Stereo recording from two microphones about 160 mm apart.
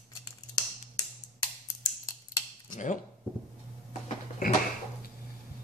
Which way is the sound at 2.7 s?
50° left (ahead or behind).